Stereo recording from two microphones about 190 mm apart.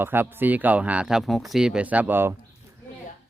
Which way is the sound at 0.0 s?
10° right (ahead or behind).